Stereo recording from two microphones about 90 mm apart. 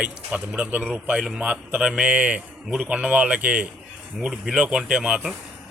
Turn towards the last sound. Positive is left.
turn(degrees=-10)  # may be behind; listen again after turning